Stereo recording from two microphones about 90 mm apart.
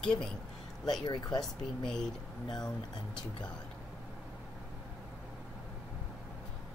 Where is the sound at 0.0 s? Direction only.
10° left (ahead or behind).